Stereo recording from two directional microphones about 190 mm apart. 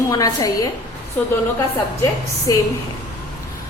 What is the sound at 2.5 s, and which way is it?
Speech, 20° left (ahead or behind).